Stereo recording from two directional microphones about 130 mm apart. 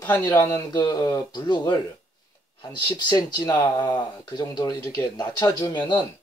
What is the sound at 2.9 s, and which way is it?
Speech, 35° left (ahead or behind).